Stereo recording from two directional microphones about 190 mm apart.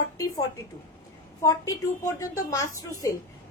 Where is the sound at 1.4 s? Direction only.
20° left (ahead or behind).